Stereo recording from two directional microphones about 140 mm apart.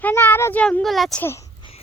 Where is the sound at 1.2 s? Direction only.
20° left (ahead or behind).